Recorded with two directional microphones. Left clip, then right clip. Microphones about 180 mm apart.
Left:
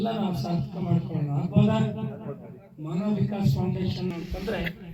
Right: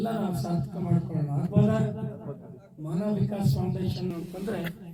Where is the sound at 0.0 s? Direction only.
45° right (ahead or behind).